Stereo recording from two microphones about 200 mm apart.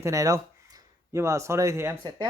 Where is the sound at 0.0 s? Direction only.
15° right (ahead or behind).